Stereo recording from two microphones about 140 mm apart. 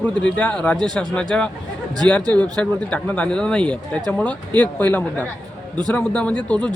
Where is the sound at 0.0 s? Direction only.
10° left (ahead or behind).